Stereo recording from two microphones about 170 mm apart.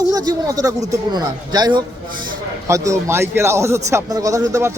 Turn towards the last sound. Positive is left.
turn(degrees=-20)  # may be behind; listen again after turning